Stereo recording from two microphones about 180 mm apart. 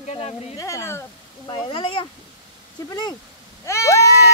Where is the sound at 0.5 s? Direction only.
15° left (ahead or behind).